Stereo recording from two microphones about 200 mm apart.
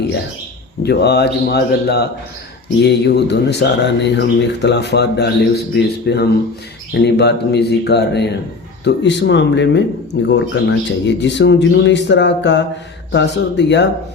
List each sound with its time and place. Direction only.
0.8 s speech: 55° left (ahead or behind)